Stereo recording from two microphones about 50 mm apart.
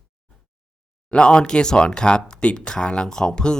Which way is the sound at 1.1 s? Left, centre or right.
Centre.